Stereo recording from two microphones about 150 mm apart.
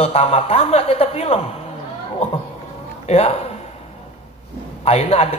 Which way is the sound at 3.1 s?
45° left (ahead or behind).